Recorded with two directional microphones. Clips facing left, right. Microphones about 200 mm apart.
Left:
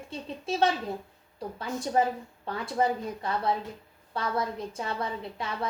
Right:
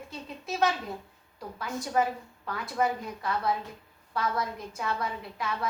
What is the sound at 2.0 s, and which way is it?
A woman's voice, 30° left (ahead or behind).